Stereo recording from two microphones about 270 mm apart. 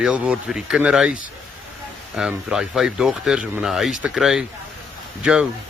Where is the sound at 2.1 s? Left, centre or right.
Centre.